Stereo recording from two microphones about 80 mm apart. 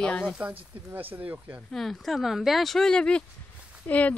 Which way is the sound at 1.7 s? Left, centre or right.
Centre.